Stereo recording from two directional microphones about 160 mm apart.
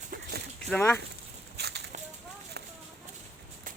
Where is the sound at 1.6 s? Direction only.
90° right.